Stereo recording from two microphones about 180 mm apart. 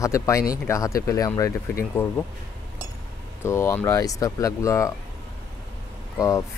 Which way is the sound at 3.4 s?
15° left (ahead or behind).